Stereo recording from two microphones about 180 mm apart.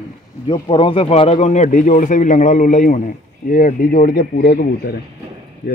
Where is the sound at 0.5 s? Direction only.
30° left (ahead or behind); by 4.5 s 50° left (ahead or behind).